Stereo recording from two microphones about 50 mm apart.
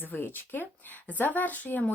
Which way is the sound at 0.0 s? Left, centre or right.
Left.